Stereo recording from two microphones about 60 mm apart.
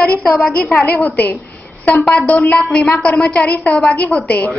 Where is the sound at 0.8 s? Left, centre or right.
Left.